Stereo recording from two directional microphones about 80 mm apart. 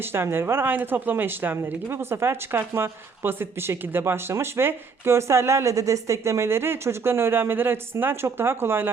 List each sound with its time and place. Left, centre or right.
0.0 s speech: right